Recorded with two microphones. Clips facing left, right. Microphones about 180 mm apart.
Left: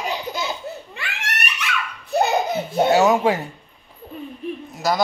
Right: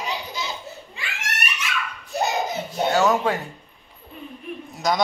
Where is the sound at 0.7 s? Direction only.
60° left (ahead or behind).